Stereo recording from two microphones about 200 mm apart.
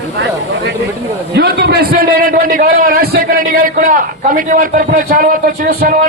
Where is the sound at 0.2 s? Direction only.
60° right (ahead or behind).